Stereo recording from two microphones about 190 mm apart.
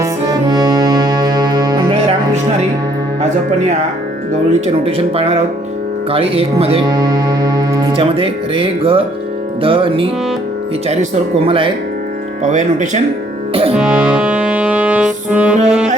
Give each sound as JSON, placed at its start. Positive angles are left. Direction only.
{"t": 0.0, "sound": "music", "side_deg": -20}
{"t": 4.6, "sound": "speech", "side_deg": -30}
{"t": 9.6, "sound": "music", "side_deg": -30}
{"t": 11.4, "sound": "music", "side_deg": -25}
{"t": 12.4, "sound": "speech", "side_deg": -40}
{"t": 13.5, "sound": "music", "side_deg": -30}
{"t": 13.7, "sound": "music", "side_deg": -5}